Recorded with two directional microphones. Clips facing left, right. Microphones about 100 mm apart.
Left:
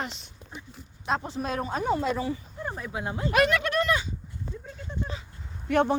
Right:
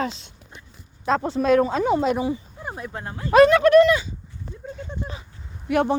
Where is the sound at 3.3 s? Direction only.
30° right (ahead or behind).